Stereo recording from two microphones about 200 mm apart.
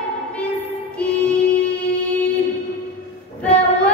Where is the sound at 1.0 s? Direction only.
5° left (ahead or behind).